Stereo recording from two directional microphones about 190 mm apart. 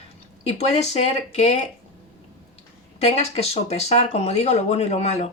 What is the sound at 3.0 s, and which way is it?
Speech, 35° left (ahead or behind).